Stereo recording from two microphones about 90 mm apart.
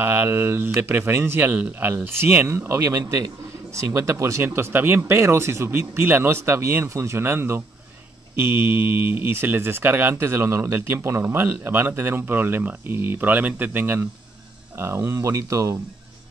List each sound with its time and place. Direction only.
0.0 s speech: 25° right (ahead or behind)